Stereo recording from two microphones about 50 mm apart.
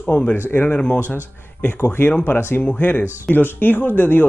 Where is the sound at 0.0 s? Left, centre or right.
Left.